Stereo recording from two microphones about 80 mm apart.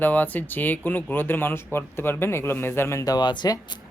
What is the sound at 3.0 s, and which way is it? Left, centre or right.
Speech, left.